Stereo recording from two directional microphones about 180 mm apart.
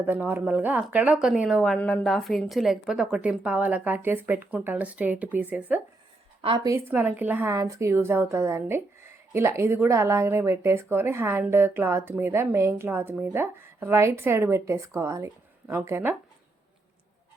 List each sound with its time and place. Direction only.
0.0 s speech: 10° right (ahead or behind)
6.4 s a woman's voice: 30° right (ahead or behind)
6.7 s speech: 15° right (ahead or behind)